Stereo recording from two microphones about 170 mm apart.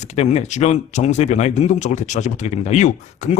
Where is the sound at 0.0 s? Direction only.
40° left (ahead or behind).